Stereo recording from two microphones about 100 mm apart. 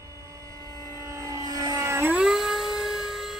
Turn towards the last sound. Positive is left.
turn(degrees=-5)  # may be behind; listen again after turning